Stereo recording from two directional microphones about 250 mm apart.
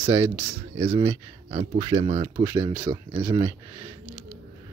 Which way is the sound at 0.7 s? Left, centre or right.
Right.